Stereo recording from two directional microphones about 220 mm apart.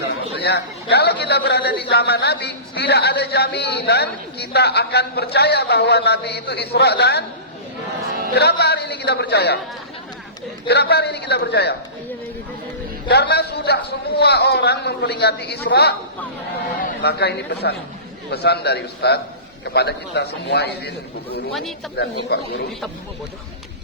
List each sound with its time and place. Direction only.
0.3 s a man's voice: 50° left (ahead or behind)
8.4 s a man's voice: 50° left (ahead or behind)
10.7 s a man's voice: 50° left (ahead or behind)
13.1 s a man's voice: 50° left (ahead or behind)
21.9 s a man's voice: 50° left (ahead or behind)